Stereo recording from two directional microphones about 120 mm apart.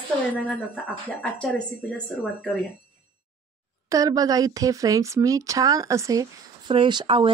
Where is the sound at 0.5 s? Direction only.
10° left (ahead or behind).